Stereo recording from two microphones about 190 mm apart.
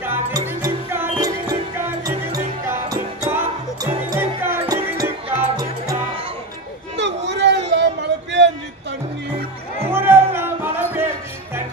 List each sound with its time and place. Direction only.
0.0 s music: 10° right (ahead or behind)
7.0 s a sound: 65° right (ahead or behind)
9.9 s music: 10° right (ahead or behind)